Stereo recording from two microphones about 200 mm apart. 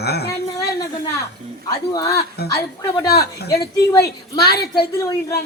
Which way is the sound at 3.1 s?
55° left (ahead or behind).